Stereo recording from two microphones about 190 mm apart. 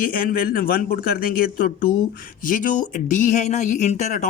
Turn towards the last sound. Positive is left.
turn(degrees=40)  # may be behind; listen again after turning